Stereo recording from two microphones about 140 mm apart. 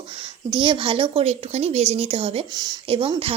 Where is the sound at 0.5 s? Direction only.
35° right (ahead or behind).